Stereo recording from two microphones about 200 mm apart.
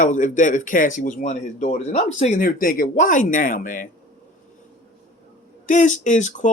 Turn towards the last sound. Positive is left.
turn(degrees=35)  # may be behind; listen again after turning